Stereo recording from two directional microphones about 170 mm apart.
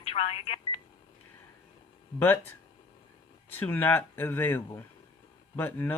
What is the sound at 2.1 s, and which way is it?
Speech, 10° left (ahead or behind).